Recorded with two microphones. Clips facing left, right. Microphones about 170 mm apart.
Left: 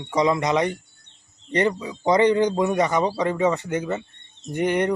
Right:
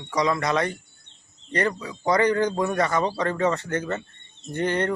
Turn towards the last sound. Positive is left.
turn(degrees=15)  # may be behind; listen again after turning